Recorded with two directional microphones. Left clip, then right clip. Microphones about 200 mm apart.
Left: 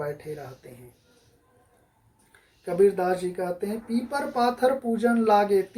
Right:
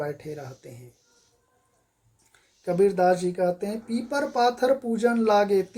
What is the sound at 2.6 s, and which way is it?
Speech, 50° right (ahead or behind).